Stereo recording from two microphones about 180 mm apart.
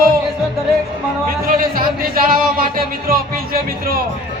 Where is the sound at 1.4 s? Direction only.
50° right (ahead or behind).